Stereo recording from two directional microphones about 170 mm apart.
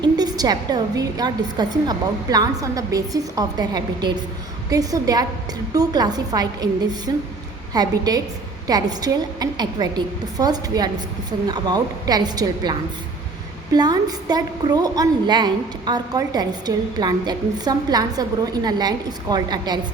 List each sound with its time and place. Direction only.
0.0 s a woman's voice: 25° right (ahead or behind)
13.7 s a woman's voice: 25° right (ahead or behind)